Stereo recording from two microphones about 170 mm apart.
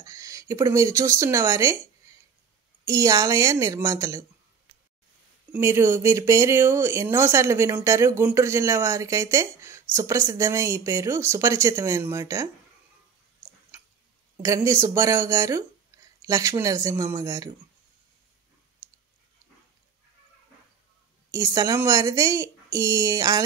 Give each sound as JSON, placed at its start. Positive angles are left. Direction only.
{"t": 0.0, "sound": "speech", "side_deg": -20}
{"t": 2.9, "sound": "speech", "side_deg": -20}
{"t": 5.5, "sound": "speech", "side_deg": -15}
{"t": 14.3, "sound": "speech", "side_deg": -20}
{"t": 15.9, "sound": "a sound", "side_deg": -20}
{"t": 16.3, "sound": "speech", "side_deg": -20}
{"t": 21.3, "sound": "speech", "side_deg": -20}